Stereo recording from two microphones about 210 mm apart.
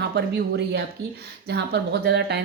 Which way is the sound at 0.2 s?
50° right (ahead or behind).